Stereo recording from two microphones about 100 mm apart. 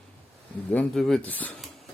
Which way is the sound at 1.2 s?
15° left (ahead or behind).